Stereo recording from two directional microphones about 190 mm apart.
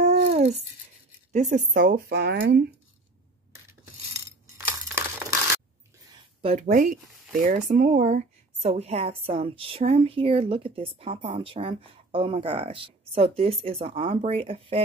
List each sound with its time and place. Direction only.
0.0 s dog: 35° right (ahead or behind)
1.3 s speech: 40° right (ahead or behind); by 2.7 s 60° right (ahead or behind)
6.4 s a woman's voice: 40° right (ahead or behind)